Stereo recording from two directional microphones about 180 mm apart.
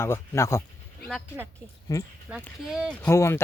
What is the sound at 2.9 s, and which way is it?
Speech, 10° left (ahead or behind).